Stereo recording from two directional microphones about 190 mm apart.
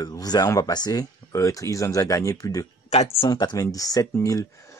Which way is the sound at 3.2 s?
20° left (ahead or behind).